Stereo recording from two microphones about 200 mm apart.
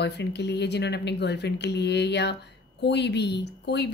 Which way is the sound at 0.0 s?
55° left (ahead or behind).